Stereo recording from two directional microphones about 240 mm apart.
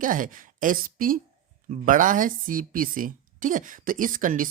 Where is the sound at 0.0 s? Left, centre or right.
Right.